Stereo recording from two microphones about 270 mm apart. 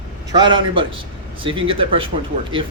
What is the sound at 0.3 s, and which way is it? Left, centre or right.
A man's voice, centre.